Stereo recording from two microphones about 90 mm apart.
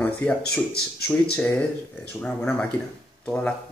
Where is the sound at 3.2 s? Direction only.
10° left (ahead or behind).